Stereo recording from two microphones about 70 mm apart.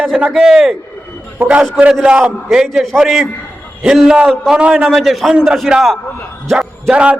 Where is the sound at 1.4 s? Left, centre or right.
Right.